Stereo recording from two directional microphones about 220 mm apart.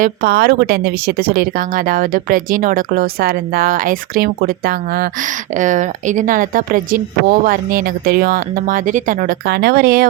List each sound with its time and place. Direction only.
0.0 s a woman's voice: 45° right (ahead or behind)